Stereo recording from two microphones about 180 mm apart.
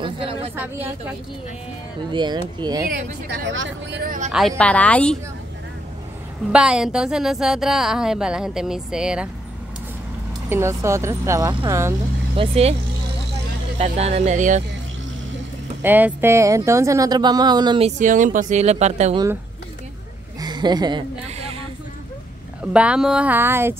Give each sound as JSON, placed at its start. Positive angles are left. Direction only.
{"t": 0.0, "sound": "a sound", "side_deg": -30}
{"t": 0.6, "sound": "speech", "side_deg": -10}
{"t": 2.1, "sound": "speech", "side_deg": -25}
{"t": 2.9, "sound": "speech", "side_deg": -80}
{"t": 4.3, "sound": "a woman's voice", "side_deg": 0}
{"t": 6.5, "sound": "a woman's voice", "side_deg": -5}
{"t": 10.5, "sound": "speech", "side_deg": -15}
{"t": 12.4, "sound": "speech", "side_deg": -35}
{"t": 13.7, "sound": "speech", "side_deg": -35}
{"t": 15.8, "sound": "speech", "side_deg": -10}
{"t": 17.8, "sound": "speech", "side_deg": -45}
{"t": 20.3, "sound": "a sound", "side_deg": -25}
{"t": 22.7, "sound": "speech", "side_deg": -5}